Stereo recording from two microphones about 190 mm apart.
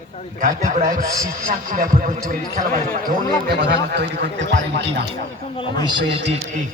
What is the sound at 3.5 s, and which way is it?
Speech, 60° right (ahead or behind).